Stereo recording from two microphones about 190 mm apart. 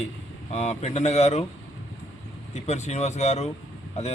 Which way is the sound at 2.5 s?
35° left (ahead or behind).